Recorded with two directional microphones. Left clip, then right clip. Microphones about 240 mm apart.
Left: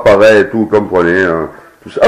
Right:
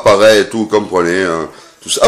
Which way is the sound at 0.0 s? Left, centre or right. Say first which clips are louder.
Left 2 dB; right.